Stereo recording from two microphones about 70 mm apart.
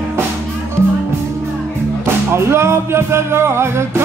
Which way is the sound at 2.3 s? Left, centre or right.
Right.